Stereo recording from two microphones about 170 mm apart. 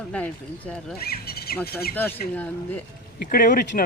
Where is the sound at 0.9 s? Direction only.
65° left (ahead or behind).